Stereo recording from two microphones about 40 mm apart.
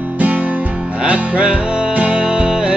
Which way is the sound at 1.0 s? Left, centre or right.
Right.